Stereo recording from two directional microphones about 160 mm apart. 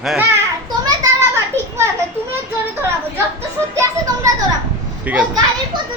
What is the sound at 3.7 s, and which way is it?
Children playing, 20° right (ahead or behind).